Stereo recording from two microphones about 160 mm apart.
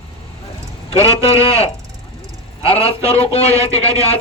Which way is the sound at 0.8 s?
40° left (ahead or behind).